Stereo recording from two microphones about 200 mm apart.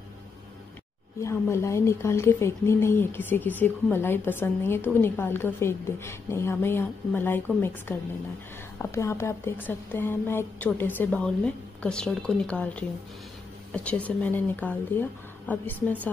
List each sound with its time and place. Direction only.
1.2 s a woman's voice: 15° left (ahead or behind)